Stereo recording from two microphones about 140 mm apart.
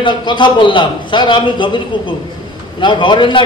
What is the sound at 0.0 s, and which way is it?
A man's voice, 35° left (ahead or behind).